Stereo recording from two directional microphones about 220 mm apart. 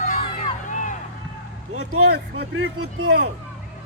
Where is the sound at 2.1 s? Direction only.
50° right (ahead or behind).